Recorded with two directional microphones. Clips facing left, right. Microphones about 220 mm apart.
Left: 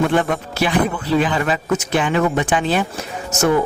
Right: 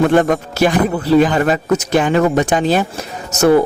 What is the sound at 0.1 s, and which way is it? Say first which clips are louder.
Speech: right 5 dB; 45° right (ahead or behind).